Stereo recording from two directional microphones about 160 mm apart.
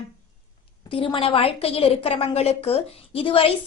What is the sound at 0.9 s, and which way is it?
A woman's voice, 35° left (ahead or behind).